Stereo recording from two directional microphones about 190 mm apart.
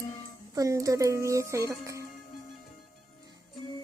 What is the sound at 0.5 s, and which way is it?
Music, 15° right (ahead or behind).